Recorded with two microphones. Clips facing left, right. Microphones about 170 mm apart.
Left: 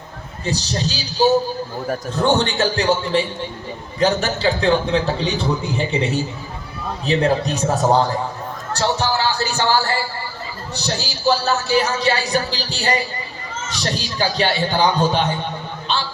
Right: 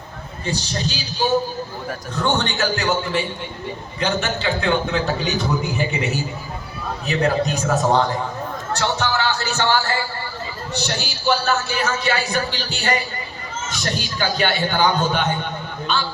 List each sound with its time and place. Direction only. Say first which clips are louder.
0.4 s a man's voice: left 2 dB; 40° left (ahead or behind)
8.7 s a sound: left 2 dB; 35° left (ahead or behind)
10.8 s a man's voice: left 1 dB; 35° left (ahead or behind)